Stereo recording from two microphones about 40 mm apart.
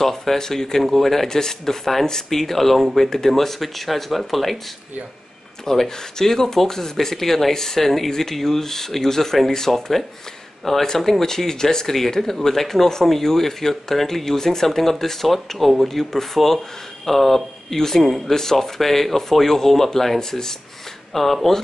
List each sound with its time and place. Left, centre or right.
0.0 s speech: centre
5.7 s speech: centre
21.1 s speech: centre